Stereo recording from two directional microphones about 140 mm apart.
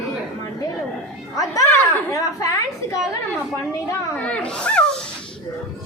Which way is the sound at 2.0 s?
25° left (ahead or behind).